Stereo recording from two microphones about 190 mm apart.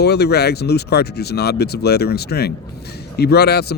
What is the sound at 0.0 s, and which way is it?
Speech, 60° left (ahead or behind).